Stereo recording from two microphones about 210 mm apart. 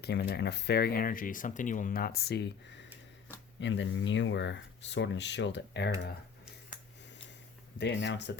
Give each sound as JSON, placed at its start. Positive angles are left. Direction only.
{"t": 0.0, "sound": "speech", "side_deg": 50}
{"t": 7.8, "sound": "speech", "side_deg": 55}